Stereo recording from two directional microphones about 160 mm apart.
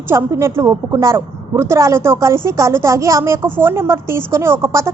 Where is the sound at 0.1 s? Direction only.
15° right (ahead or behind).